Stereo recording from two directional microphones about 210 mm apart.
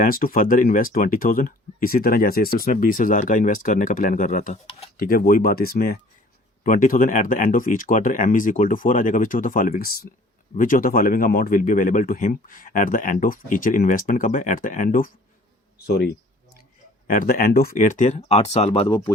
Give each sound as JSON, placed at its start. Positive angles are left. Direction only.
{"t": 0.0, "sound": "speech", "side_deg": 40}
{"t": 4.6, "sound": "speech", "side_deg": 25}
{"t": 4.9, "sound": "speech", "side_deg": 45}
{"t": 17.1, "sound": "speech", "side_deg": 40}